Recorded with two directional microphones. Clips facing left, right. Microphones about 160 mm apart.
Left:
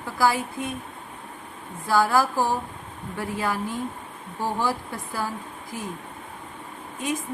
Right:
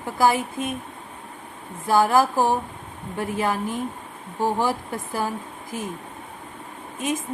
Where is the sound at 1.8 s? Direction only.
20° right (ahead or behind).